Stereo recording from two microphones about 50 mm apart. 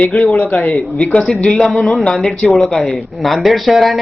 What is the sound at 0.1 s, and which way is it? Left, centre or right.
Speech, centre.